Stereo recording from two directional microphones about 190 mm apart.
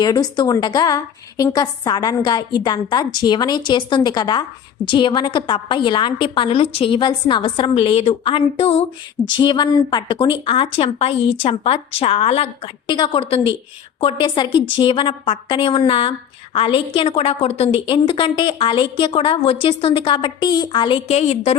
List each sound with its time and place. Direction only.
0.0 s a woman's voice: 20° left (ahead or behind)